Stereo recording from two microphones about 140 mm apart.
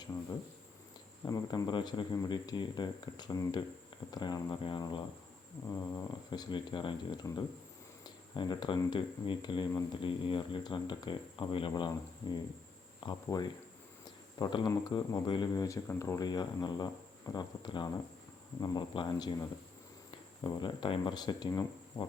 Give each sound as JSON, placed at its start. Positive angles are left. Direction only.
{"t": 1.3, "sound": "speech", "side_deg": 30}
{"t": 13.0, "sound": "speech", "side_deg": 30}